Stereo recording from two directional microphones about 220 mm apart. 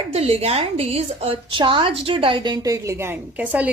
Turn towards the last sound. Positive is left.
turn(degrees=-5)  # may be behind; listen again after turning